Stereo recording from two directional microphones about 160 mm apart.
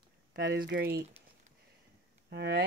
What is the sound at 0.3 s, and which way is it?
Speech, 90° right.